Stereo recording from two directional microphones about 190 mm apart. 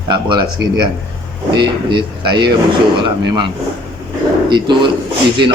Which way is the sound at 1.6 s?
25° right (ahead or behind).